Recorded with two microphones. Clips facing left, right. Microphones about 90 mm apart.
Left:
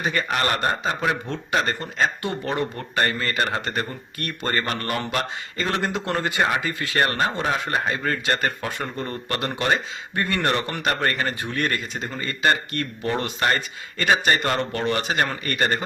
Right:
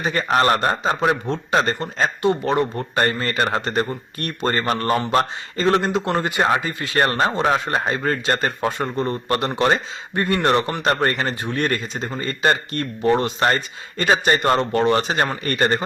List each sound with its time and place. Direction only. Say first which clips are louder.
0.0 s speech: right 2 dB; 25° right (ahead or behind)
0.3 s speech: right 9 dB; 35° right (ahead or behind)
5.8 s speech: right 4 dB; 20° right (ahead or behind)
12.7 s speech: right 7 dB; 20° right (ahead or behind)